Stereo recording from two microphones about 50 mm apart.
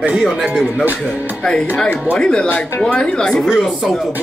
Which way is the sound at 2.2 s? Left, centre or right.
Centre.